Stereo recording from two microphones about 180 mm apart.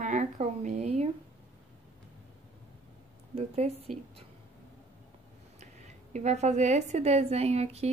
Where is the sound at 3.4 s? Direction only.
35° right (ahead or behind).